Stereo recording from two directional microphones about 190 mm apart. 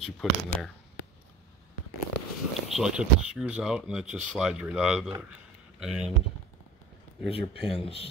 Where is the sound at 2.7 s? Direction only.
5° right (ahead or behind).